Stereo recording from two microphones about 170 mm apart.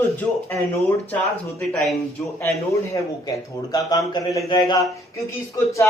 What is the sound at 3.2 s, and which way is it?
Speech, 20° left (ahead or behind).